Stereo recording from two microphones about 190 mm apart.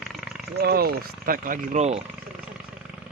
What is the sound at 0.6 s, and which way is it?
Speech, 55° right (ahead or behind).